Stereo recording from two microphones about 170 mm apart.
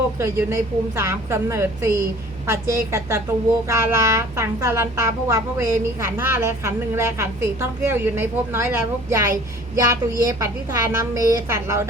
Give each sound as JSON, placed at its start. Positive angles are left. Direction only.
{"t": 0.2, "sound": "speech", "side_deg": -15}